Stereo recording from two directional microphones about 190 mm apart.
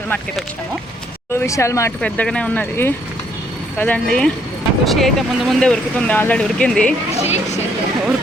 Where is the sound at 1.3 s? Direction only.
15° left (ahead or behind).